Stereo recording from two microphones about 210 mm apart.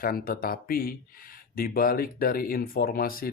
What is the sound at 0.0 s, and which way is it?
Speech, 45° left (ahead or behind).